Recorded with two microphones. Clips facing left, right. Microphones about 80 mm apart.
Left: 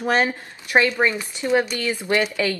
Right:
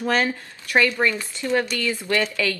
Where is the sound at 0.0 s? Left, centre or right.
Left.